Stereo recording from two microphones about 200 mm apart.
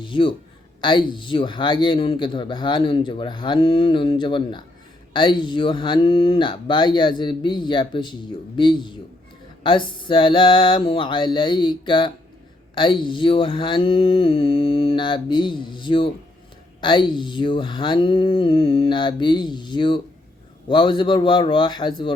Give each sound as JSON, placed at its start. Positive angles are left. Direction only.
{"t": 0.0, "sound": "a man's voice", "side_deg": 25}